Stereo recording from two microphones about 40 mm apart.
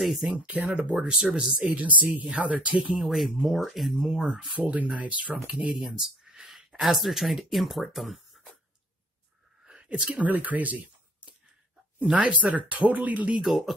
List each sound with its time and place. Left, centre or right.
0.0 s speech: centre
0.8 s speech: right
1.8 s speech: right
2.9 s speech: centre
4.6 s speech: right
5.9 s speech: centre
9.9 s speech: right
10.2 s speech: right
13.4 s speech: centre